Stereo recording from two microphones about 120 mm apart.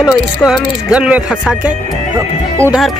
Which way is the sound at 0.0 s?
5° right (ahead or behind).